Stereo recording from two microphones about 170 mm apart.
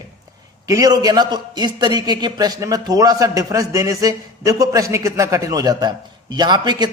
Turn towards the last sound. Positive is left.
turn(degrees=-25)  # may be behind; listen again after turning